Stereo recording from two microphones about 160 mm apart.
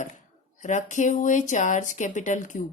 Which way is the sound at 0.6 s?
50° left (ahead or behind).